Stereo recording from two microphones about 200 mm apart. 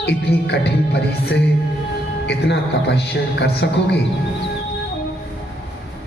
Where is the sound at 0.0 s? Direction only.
55° left (ahead or behind).